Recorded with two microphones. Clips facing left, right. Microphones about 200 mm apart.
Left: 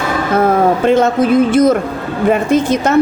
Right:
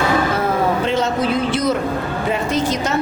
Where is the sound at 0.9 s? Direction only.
50° left (ahead or behind).